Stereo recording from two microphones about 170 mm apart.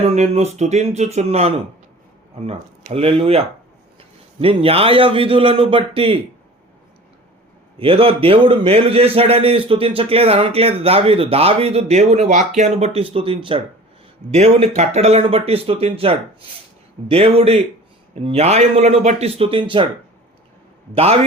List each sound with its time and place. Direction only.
0.1 s a man's voice: 40° right (ahead or behind)
7.8 s a man's voice: 35° right (ahead or behind)
20.9 s a man's voice: 35° right (ahead or behind)